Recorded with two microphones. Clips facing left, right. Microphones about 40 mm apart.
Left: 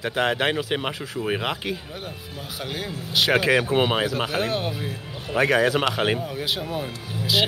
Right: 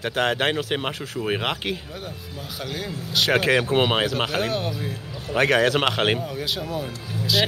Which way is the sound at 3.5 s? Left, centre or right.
Centre.